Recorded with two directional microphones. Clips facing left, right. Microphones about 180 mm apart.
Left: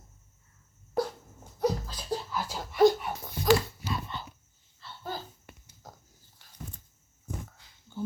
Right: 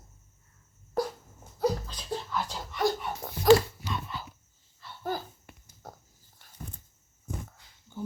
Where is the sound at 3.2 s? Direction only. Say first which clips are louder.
Right 2 dB; 65° right (ahead or behind).